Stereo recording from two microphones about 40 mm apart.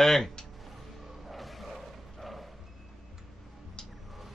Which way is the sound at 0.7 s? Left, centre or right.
Centre.